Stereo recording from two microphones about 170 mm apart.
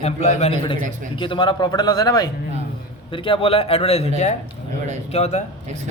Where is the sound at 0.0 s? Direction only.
40° left (ahead or behind).